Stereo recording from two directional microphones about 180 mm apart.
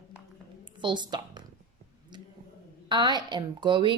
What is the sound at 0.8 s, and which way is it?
Speech, 25° right (ahead or behind).